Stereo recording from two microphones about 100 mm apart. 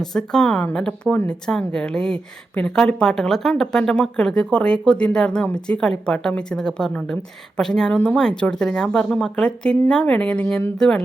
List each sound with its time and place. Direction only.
0.0 s a woman's voice: 5° left (ahead or behind)